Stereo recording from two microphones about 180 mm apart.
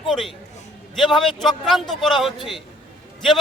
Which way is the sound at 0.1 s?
Centre (ahead or behind).